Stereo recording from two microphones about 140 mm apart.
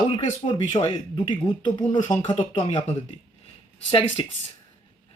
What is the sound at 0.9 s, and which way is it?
Speech, 30° left (ahead or behind).